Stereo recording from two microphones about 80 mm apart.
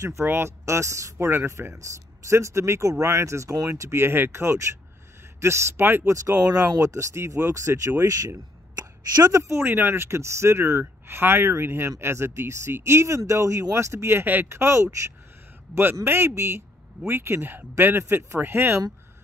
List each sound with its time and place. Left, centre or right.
0.2 s speech: right
1.1 s speech: right
9.3 s a man's voice: right